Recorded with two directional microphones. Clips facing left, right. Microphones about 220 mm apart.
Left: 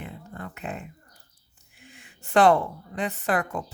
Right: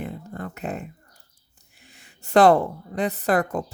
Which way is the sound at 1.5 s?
35° right (ahead or behind).